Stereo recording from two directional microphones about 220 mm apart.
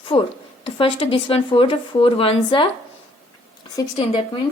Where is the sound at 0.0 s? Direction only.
25° left (ahead or behind).